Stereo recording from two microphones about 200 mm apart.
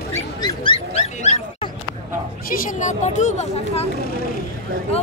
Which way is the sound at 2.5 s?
40° left (ahead or behind).